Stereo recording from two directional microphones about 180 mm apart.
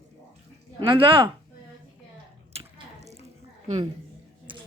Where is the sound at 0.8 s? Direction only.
30° right (ahead or behind).